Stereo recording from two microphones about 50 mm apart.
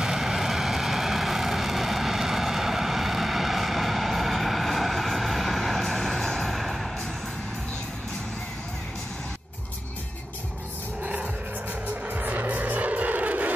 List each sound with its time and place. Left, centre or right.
0.0 s vehicle: centre
12.1 s vehicle: right